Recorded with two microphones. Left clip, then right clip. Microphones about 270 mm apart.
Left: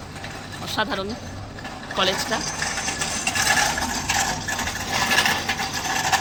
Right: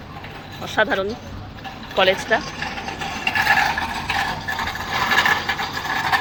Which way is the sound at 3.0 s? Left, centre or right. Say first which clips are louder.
Right 6 dB; centre.